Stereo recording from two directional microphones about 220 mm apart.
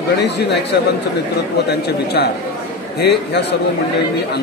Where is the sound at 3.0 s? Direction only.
50° left (ahead or behind).